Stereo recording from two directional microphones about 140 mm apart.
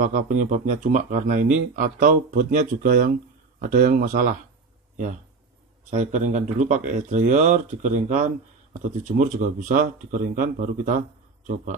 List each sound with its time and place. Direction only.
0.0 s speech: 65° right (ahead or behind)
5.9 s speech: 55° right (ahead or behind)